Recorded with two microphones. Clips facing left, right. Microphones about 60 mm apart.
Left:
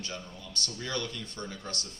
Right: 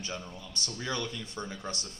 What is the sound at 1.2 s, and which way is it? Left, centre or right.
Speech, centre.